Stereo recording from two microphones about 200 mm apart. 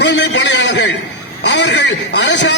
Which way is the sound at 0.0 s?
60° left (ahead or behind).